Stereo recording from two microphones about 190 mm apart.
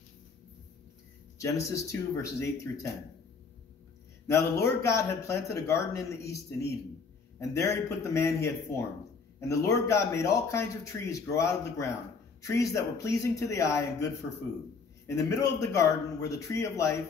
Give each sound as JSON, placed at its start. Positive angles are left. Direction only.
{"t": 1.4, "sound": "a man's voice", "side_deg": 15}
{"t": 4.6, "sound": "a man's voice", "side_deg": 15}